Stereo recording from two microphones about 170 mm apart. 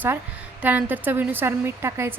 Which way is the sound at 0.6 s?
10° right (ahead or behind).